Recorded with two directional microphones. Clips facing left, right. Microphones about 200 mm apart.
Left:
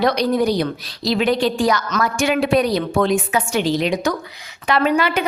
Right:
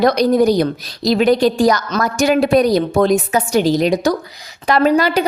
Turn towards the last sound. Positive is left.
turn(degrees=-35)  # may be behind; listen again after turning